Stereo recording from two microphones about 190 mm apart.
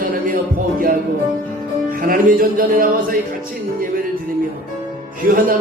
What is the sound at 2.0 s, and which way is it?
Speech, 45° right (ahead or behind).